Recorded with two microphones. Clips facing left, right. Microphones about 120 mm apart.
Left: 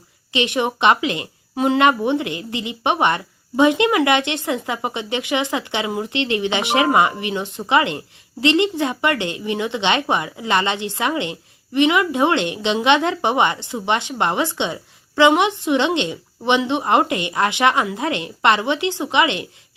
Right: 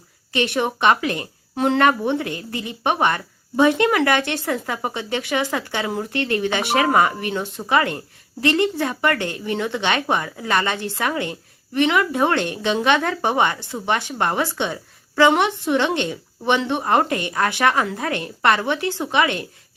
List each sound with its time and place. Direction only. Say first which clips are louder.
0.3 s speech: left 1 dB; 15° left (ahead or behind)
5.8 s speech: left 1 dB; 5° left (ahead or behind)
6.1 s a woman's voice: left 1 dB; 15° left (ahead or behind)